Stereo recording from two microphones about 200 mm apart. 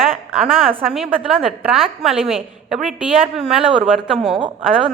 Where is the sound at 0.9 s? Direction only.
Centre (ahead or behind).